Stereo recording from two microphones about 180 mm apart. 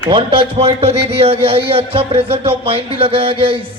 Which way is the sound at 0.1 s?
30° right (ahead or behind).